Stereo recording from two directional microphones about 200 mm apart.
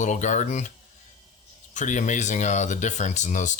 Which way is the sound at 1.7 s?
35° left (ahead or behind).